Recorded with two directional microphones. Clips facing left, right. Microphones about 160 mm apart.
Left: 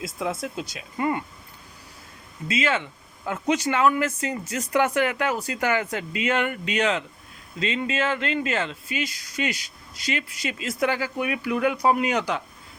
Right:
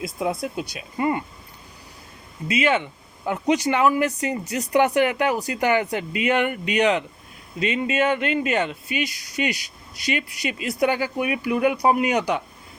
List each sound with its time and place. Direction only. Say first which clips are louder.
0.5 s speech: right 3 dB; 15° right (ahead or behind)
2.5 s speech: right 4 dB; 15° right (ahead or behind)